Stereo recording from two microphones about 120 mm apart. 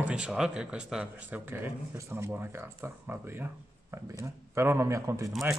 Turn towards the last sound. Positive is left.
turn(degrees=0)  # may be behind; listen again after turning